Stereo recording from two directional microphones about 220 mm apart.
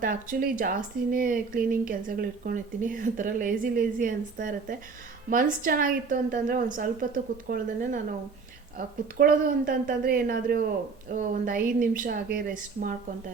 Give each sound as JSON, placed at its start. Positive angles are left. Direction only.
{"t": 0.0, "sound": "a woman's voice", "side_deg": -40}
{"t": 9.1, "sound": "a woman's voice", "side_deg": -40}